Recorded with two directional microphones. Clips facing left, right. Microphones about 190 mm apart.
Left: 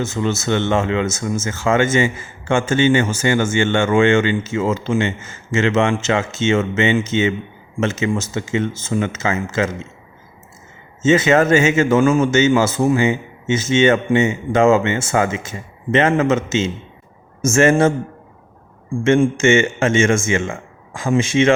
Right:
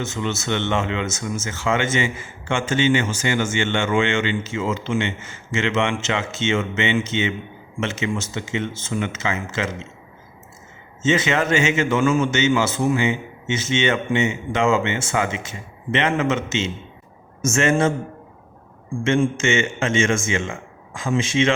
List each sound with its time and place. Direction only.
0.0 s a man's voice: 40° left (ahead or behind)
11.0 s a man's voice: 45° left (ahead or behind)
19.0 s a man's voice: 50° left (ahead or behind)